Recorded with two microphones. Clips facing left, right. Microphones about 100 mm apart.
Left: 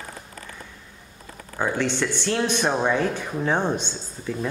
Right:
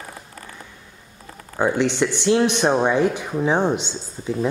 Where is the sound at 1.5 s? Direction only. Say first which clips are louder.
Right 5 dB; 15° right (ahead or behind).